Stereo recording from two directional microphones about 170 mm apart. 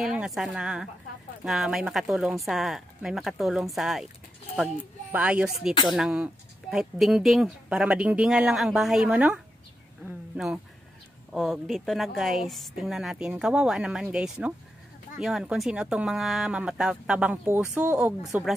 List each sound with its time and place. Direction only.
0.0 s speech: 5° right (ahead or behind)
5.1 s speech: 5° right (ahead or behind)
10.0 s a sound: 5° right (ahead or behind)
11.3 s speech: centre (ahead or behind)